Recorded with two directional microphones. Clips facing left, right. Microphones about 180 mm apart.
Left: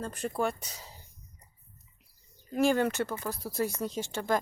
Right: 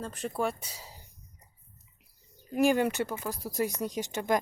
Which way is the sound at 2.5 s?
15° right (ahead or behind).